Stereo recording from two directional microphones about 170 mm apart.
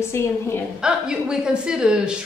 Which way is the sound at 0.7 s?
5° right (ahead or behind).